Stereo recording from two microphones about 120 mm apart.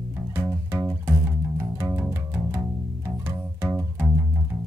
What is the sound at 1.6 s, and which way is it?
Music, 20° right (ahead or behind).